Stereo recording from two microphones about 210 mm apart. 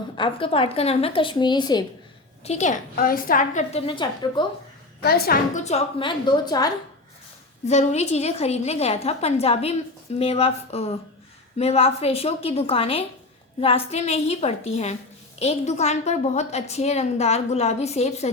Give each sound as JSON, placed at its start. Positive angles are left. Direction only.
{"t": 0.2, "sound": "a woman's voice", "side_deg": 25}
{"t": 2.4, "sound": "a woman's voice", "side_deg": 30}
{"t": 5.0, "sound": "a woman's voice", "side_deg": 45}
{"t": 7.6, "sound": "a woman's voice", "side_deg": 30}